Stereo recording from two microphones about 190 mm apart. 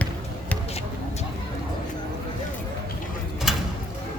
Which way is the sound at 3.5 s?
Centre (ahead or behind).